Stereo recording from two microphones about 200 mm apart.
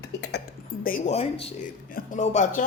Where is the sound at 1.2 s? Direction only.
30° left (ahead or behind).